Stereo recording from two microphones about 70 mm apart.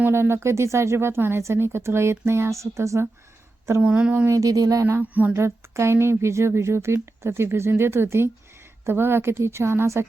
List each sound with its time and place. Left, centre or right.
0.1 s speech: right
3.8 s speech: centre
4.3 s speech: right
5.3 s speech: right